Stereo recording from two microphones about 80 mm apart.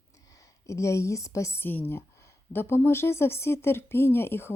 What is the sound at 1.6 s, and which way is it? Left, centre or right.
Speech, left.